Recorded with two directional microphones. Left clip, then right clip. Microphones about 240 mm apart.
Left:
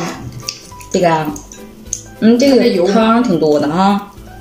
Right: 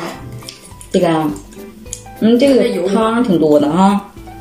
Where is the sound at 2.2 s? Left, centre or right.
Centre.